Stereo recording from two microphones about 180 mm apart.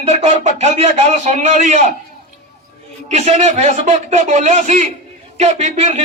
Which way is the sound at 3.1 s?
40° right (ahead or behind).